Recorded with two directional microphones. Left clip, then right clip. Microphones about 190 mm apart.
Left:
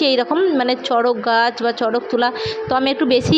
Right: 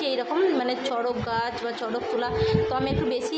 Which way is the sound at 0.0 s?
40° left (ahead or behind).